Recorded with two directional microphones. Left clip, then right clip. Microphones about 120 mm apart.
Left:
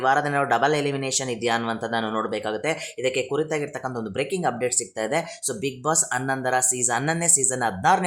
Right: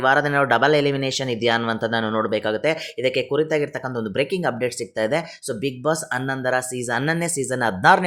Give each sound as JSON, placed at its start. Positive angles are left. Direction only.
{"t": 0.0, "sound": "speech", "side_deg": -25}
{"t": 7.8, "sound": "speech", "side_deg": -40}